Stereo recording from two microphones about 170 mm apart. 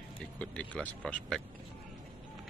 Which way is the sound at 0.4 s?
5° left (ahead or behind).